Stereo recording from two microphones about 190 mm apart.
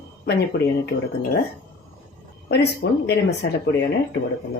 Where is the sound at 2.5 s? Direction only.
60° left (ahead or behind).